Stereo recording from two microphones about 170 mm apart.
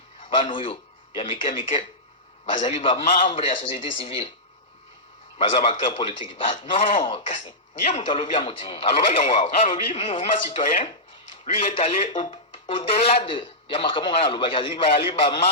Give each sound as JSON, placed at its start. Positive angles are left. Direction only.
{"t": 0.3, "sound": "a man's voice", "side_deg": 30}
{"t": 5.4, "sound": "speech", "side_deg": 30}